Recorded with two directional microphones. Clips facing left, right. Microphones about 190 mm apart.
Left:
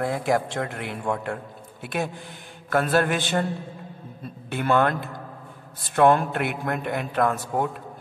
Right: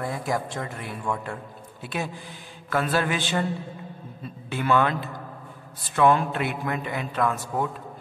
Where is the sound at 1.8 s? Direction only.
55° left (ahead or behind).